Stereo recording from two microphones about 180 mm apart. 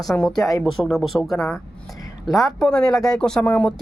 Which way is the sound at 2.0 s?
20° left (ahead or behind).